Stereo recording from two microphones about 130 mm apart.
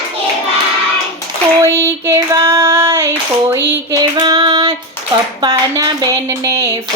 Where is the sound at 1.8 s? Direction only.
20° right (ahead or behind).